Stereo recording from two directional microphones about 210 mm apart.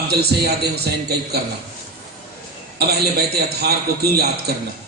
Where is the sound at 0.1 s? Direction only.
50° right (ahead or behind).